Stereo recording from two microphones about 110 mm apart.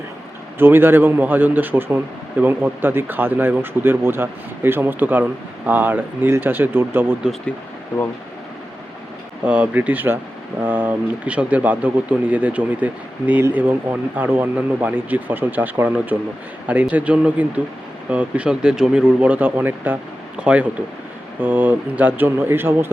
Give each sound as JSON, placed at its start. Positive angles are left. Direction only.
{"t": 0.6, "sound": "speech", "side_deg": -20}
{"t": 9.4, "sound": "speech", "side_deg": -10}